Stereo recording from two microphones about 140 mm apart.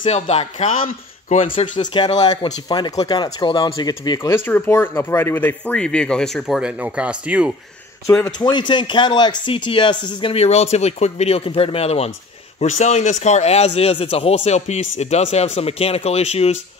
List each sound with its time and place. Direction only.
0.0 s a man's voice: 50° left (ahead or behind)
2.1 s speech: 30° left (ahead or behind); by 7.5 s 10° right (ahead or behind)
8.4 s a man's voice: 30° left (ahead or behind); by 16.5 s 50° left (ahead or behind)